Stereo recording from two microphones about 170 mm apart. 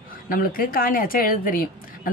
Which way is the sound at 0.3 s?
55° left (ahead or behind).